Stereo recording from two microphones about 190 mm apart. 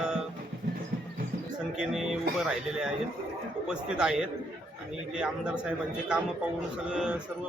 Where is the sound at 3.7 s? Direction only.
5° right (ahead or behind).